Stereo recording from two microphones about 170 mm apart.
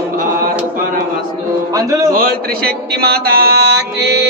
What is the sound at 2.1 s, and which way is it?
A man's voice, 65° right (ahead or behind).